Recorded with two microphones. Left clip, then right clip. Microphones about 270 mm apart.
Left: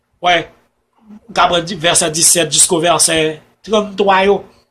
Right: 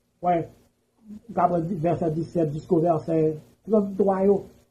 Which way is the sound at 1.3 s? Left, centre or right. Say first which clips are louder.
Left 10 dB; left.